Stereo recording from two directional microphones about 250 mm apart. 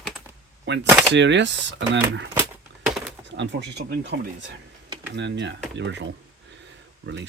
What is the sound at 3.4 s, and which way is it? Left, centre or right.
Speech, right.